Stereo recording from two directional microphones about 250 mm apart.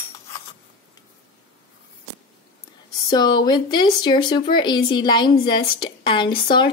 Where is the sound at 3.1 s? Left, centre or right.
Centre.